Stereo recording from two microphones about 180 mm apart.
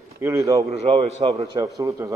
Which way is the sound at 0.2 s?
15° right (ahead or behind).